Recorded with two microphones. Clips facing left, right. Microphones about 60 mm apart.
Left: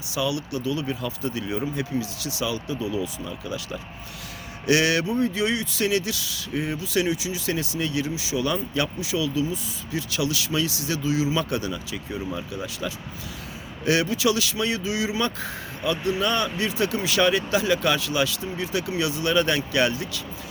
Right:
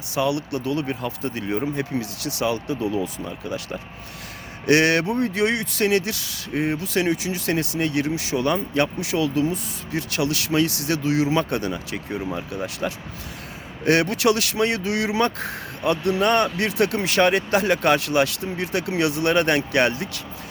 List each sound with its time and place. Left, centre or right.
0.1 s speech: right
2.9 s speech: right
4.6 s speech: right
11.3 s speech: right
12.8 s speech: right
13.8 s speech: right